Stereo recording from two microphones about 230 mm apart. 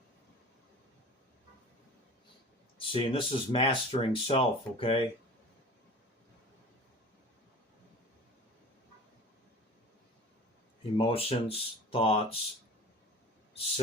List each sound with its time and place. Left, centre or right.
2.7 s speech: left
10.9 s speech: left